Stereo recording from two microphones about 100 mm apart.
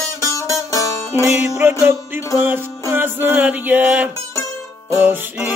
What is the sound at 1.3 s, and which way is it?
Music, 25° right (ahead or behind).